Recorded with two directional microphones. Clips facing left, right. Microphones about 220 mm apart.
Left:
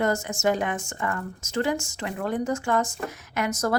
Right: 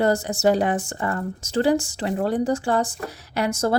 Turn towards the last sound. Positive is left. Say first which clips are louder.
# right 3 dB
turn(degrees=-30)  # may be behind; listen again after turning